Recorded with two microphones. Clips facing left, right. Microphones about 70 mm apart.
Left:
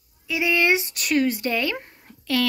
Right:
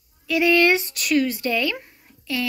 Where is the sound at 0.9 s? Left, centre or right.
Left.